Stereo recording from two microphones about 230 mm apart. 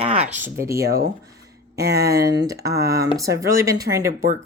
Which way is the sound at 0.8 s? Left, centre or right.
Right.